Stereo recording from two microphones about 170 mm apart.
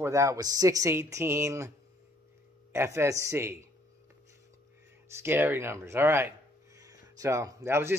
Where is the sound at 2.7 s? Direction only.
15° right (ahead or behind).